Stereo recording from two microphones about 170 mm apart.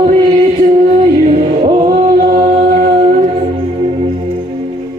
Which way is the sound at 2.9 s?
35° right (ahead or behind).